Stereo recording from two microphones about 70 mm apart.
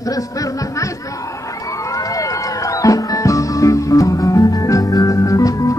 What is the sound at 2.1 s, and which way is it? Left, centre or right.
Music, left.